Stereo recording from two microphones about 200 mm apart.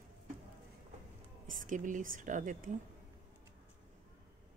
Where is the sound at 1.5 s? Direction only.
40° right (ahead or behind).